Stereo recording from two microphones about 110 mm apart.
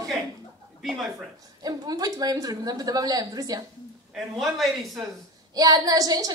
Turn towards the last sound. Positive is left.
turn(degrees=-35)  # may be behind; listen again after turning